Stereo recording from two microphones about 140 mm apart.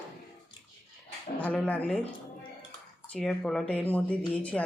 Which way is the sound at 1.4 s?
10° left (ahead or behind).